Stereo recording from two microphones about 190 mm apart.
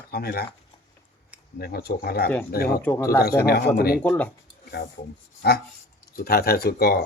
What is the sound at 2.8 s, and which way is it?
Speech, 15° left (ahead or behind).